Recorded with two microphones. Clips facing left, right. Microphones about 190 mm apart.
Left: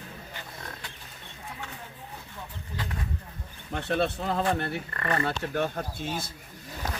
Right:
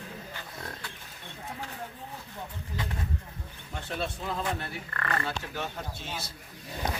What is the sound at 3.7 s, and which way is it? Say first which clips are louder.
Speech: left 7 dB; 65° left (ahead or behind).